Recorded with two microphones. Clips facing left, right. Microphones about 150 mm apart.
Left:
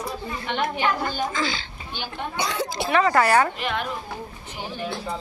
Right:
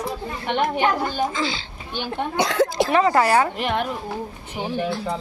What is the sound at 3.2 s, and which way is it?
Speech, 15° right (ahead or behind).